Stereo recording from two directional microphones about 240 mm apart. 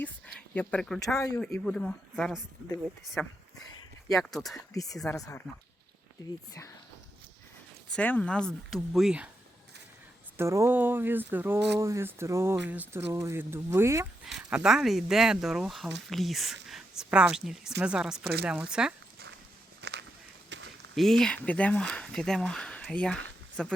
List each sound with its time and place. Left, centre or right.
0.5 s speech: centre
1.1 s speech: centre
4.5 s speech: centre
4.9 s speech: centre
6.2 s speech: centre
7.9 s speech: centre
10.3 s speech: centre
19.8 s walk: right
20.5 s a sound: right
20.9 s speech: centre